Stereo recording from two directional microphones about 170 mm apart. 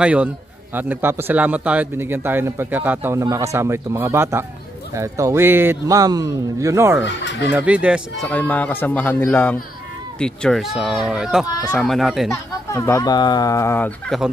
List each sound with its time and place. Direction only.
0.0 s a man's voice: 5° right (ahead or behind)
7.0 s speech: 90° left
7.5 s a man's voice: 10° right (ahead or behind)
8.3 s speech: 10° left (ahead or behind)
12.3 s speech: 15° left (ahead or behind)